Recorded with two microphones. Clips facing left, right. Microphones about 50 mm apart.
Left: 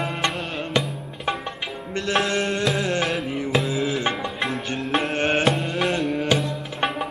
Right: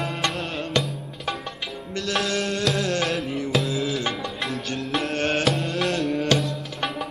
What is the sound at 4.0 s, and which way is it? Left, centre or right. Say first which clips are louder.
Music: left 3 dB; left.